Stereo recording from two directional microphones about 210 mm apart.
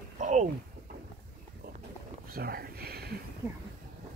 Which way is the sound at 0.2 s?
35° right (ahead or behind).